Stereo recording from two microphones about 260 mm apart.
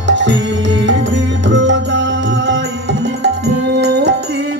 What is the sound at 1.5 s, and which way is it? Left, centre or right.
Music, right.